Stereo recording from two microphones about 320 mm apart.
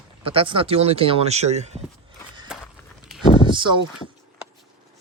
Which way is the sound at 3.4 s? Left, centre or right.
Centre.